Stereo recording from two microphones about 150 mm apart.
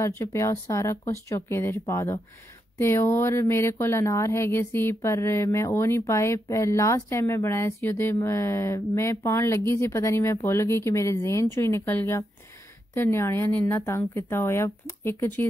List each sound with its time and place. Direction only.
0.0 s speech: 20° left (ahead or behind)